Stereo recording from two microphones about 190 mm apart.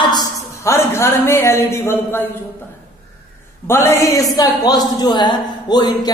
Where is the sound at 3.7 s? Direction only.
15° left (ahead or behind).